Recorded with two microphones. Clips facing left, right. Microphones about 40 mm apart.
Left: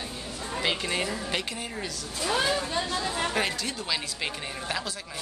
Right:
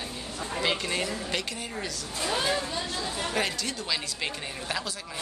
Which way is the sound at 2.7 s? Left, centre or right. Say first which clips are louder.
Left 3 dB; left.